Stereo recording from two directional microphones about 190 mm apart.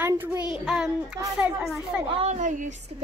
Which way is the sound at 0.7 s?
Centre (ahead or behind).